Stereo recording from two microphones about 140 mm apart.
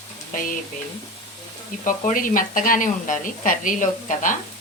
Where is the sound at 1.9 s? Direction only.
75° left (ahead or behind).